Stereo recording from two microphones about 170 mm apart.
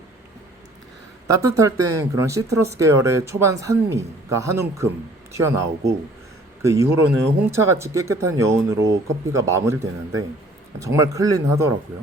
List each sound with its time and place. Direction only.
1.3 s speech: 20° right (ahead or behind)